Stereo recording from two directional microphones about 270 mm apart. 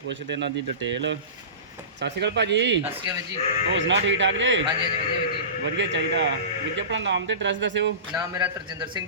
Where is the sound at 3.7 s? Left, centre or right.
Right.